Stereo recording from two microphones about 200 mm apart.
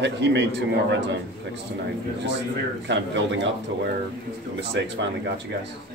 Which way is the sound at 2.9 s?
60° right (ahead or behind).